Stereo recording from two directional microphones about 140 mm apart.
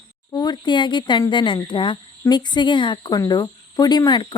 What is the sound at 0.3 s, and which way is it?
Speech, 30° left (ahead or behind).